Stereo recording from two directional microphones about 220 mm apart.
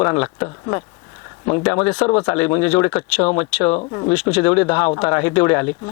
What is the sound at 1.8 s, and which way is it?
Speech, 5° left (ahead or behind).